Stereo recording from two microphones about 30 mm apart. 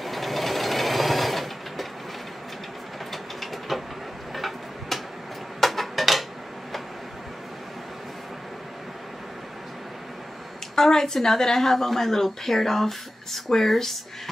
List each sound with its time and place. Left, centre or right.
0.0 s sewing machine: centre
3.1 s train: centre
4.4 s tick-tock: centre
5.6 s dishes: centre
10.8 s a sound: centre
11.2 s a woman's voice: centre